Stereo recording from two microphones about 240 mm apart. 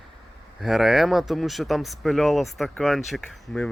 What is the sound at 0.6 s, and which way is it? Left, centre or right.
Speech, centre.